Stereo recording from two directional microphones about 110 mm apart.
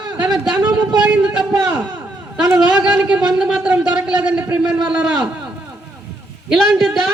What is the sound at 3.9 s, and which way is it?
Speech, 10° right (ahead or behind).